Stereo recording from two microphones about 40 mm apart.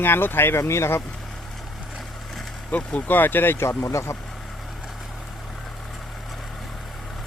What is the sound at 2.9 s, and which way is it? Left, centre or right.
Speech, left.